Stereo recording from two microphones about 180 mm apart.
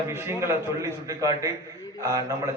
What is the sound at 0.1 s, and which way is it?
A man's voice, 15° right (ahead or behind).